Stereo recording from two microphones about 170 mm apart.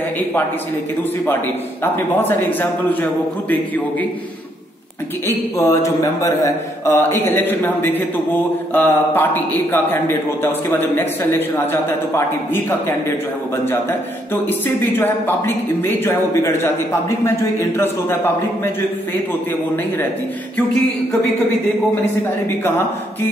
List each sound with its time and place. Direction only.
1.8 s a man's voice: 10° left (ahead or behind)
5.2 s a man's voice: 15° left (ahead or behind)
14.5 s a man's voice: 10° left (ahead or behind)